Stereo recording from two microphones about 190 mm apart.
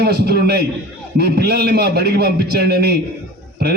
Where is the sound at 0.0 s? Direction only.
55° right (ahead or behind).